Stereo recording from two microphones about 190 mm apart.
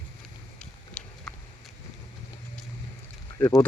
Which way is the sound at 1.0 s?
5° left (ahead or behind).